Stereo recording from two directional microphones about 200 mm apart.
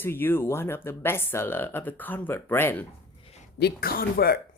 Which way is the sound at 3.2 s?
30° left (ahead or behind).